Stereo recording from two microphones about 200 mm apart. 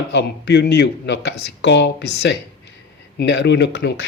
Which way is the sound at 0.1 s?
60° left (ahead or behind).